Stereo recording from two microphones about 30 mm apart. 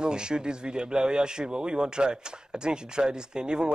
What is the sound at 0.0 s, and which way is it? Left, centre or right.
Speech, right.